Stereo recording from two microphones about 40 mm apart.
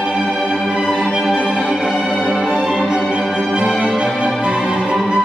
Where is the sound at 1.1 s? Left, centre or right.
Centre.